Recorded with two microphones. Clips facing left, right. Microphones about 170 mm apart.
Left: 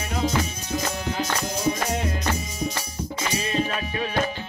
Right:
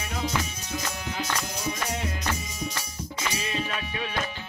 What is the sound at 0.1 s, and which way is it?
Music, 25° left (ahead or behind).